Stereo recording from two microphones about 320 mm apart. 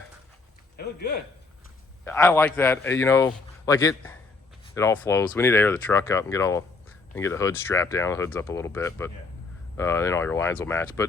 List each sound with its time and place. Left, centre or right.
0.8 s a man's voice: left
2.0 s a man's voice: centre